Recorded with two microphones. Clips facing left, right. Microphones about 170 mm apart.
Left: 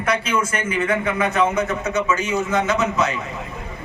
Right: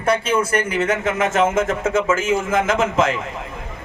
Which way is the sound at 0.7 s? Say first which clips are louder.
Right 1 dB; 85° right.